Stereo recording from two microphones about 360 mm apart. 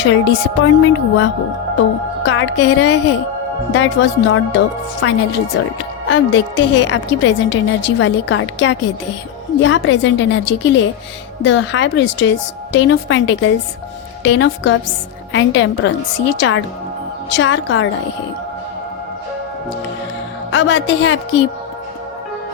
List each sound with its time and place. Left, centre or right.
0.0 s a woman's voice: left
6.1 s a woman's voice: left
20.5 s speech: left